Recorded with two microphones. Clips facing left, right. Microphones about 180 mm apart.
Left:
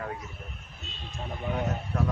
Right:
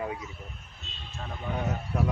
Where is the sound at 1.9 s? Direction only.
15° right (ahead or behind).